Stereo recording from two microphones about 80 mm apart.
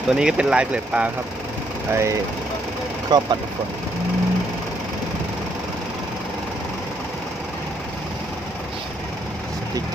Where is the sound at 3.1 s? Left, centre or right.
Right.